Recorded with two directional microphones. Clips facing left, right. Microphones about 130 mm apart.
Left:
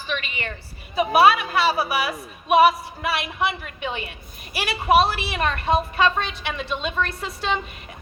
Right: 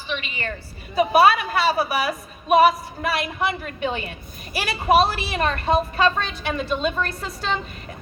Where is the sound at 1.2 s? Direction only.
45° right (ahead or behind).